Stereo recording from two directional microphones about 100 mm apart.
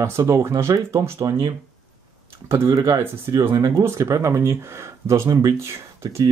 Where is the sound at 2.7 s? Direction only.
35° right (ahead or behind).